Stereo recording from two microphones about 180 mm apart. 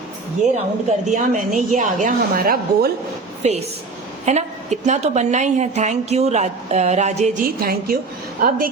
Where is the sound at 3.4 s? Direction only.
35° right (ahead or behind).